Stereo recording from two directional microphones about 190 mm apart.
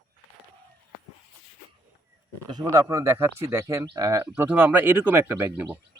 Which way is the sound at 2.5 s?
20° right (ahead or behind).